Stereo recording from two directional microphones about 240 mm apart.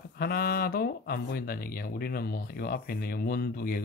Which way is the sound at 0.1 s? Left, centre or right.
Left.